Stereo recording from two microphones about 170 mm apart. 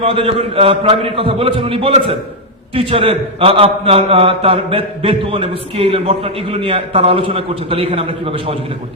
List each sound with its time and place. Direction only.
0.0 s a man's voice: 35° right (ahead or behind)